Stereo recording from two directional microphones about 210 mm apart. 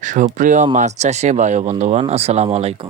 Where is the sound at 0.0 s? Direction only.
35° right (ahead or behind).